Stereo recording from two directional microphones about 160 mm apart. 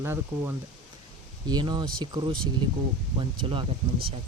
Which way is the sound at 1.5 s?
25° right (ahead or behind).